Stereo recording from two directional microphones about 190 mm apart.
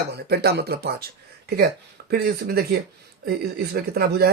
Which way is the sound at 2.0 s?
55° right (ahead or behind).